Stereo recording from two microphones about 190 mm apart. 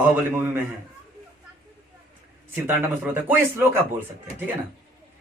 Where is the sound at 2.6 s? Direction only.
10° right (ahead or behind).